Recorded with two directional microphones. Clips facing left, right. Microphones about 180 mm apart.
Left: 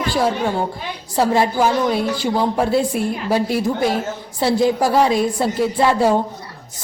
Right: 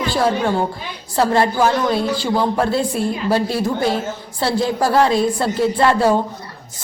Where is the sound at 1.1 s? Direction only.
10° left (ahead or behind).